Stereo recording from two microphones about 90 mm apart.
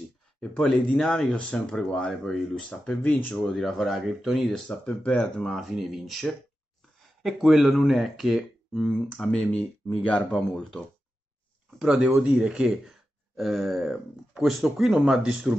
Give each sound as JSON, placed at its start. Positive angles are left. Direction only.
{"t": 0.4, "sound": "speech", "side_deg": 10}
{"t": 2.8, "sound": "speech", "side_deg": 15}
{"t": 3.4, "sound": "speech", "side_deg": 0}
{"t": 4.6, "sound": "speech", "side_deg": 10}
{"t": 11.8, "sound": "speech", "side_deg": -5}